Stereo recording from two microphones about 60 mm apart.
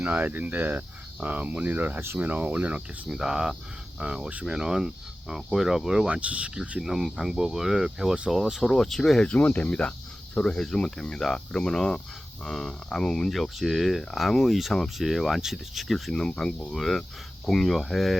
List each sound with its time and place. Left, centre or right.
0.0 s speech: right
3.1 s speech: centre
6.1 s speech: right; by 9.3 s centre
9.3 s speech: left; by 16.1 s centre
16.1 s speech: centre